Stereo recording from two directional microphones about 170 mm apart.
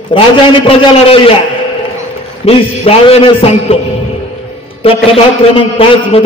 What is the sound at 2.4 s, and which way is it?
A man's voice, 35° left (ahead or behind).